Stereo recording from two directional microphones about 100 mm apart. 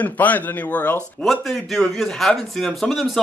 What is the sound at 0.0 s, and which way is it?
Speech, 15° left (ahead or behind).